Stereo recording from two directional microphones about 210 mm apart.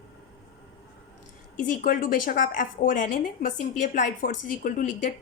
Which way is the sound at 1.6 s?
40° left (ahead or behind).